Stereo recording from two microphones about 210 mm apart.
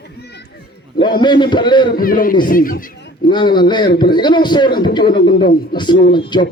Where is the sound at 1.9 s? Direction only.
45° left (ahead or behind).